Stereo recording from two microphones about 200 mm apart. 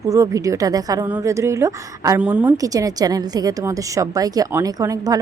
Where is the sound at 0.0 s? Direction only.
15° right (ahead or behind).